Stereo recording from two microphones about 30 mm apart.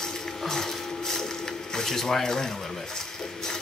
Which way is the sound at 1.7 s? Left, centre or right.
Centre.